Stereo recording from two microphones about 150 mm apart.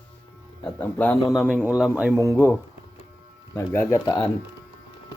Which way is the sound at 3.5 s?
15° left (ahead or behind).